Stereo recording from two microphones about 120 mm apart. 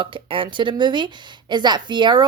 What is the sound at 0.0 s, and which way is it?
Speech, 45° right (ahead or behind).